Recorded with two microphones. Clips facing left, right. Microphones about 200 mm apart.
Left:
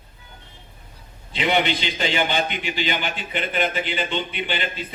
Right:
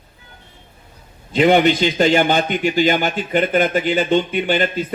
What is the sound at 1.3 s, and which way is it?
A man's voice, 45° right (ahead or behind).